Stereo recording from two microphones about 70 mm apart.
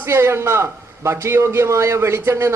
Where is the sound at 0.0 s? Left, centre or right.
Right.